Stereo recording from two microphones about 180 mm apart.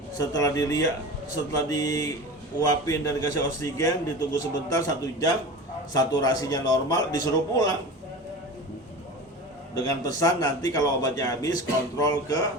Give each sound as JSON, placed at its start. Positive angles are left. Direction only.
{"t": 0.2, "sound": "a man's voice", "side_deg": 20}
{"t": 9.7, "sound": "a man's voice", "side_deg": 20}